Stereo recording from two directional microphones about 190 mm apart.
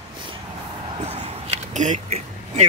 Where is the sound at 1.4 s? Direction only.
35° right (ahead or behind).